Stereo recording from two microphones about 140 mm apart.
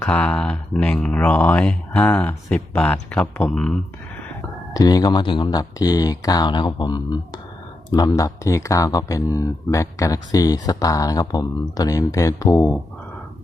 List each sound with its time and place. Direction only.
0.0 s speech: 10° left (ahead or behind)
4.7 s speech: 25° left (ahead or behind)